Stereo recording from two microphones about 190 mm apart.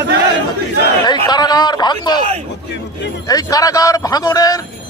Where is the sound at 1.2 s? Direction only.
20° left (ahead or behind).